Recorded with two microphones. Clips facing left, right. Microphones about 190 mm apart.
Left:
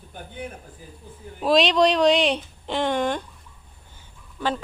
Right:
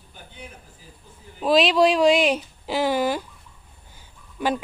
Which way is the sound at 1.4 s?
Centre (ahead or behind).